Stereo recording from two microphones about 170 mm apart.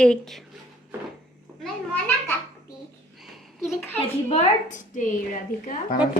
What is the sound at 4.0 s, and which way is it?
A woman's voice, 40° left (ahead or behind).